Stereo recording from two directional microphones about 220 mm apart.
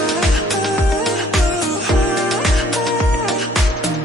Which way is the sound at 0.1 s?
Centre (ahead or behind).